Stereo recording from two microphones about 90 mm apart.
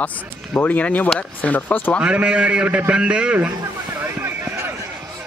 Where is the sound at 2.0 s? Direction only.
10° right (ahead or behind).